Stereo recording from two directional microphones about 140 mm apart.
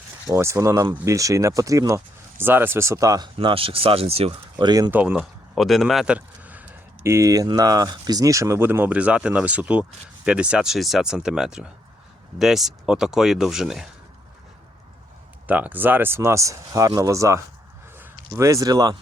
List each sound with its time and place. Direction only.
0.3 s speech: 20° right (ahead or behind)
3.3 s speech: 40° right (ahead or behind)
4.5 s speech: 30° right (ahead or behind)
4.9 s speech: 10° right (ahead or behind)
5.5 s speech: centre (ahead or behind)
15.4 s speech: 10° right (ahead or behind); by 18.9 s 30° right (ahead or behind)